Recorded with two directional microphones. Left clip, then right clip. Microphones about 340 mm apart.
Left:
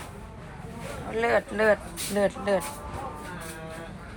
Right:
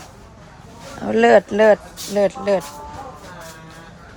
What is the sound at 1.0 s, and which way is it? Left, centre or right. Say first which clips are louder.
Speech: right 12 dB; centre.